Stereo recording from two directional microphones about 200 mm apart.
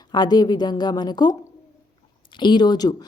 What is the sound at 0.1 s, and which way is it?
Speech, 20° left (ahead or behind).